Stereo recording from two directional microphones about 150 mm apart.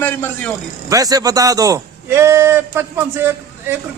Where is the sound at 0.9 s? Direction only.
25° right (ahead or behind).